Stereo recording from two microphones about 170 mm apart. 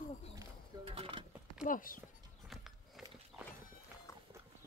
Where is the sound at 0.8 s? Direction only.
35° right (ahead or behind).